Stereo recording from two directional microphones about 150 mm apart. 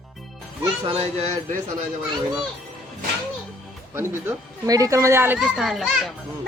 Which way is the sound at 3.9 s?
15° right (ahead or behind).